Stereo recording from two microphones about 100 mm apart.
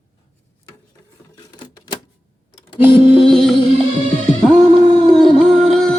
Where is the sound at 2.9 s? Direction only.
65° left (ahead or behind).